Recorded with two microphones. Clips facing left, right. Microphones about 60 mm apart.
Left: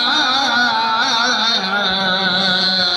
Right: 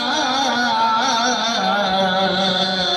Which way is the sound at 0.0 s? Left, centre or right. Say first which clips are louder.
Left 2 dB; left.